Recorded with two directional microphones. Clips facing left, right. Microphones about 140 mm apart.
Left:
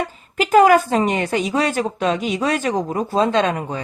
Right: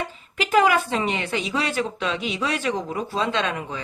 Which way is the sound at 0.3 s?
45° left (ahead or behind).